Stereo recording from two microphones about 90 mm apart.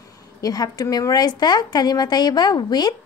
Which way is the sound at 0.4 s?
45° left (ahead or behind).